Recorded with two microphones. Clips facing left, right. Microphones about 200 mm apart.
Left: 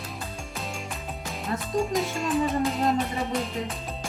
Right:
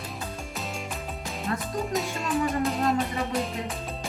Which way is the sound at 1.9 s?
Centre (ahead or behind).